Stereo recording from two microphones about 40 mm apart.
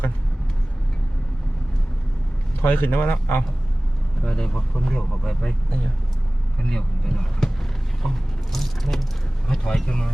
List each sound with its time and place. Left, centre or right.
2.6 s a man's voice: left
4.2 s speech: centre
6.6 s speech: centre
8.0 s a sound: centre
9.5 s speech: centre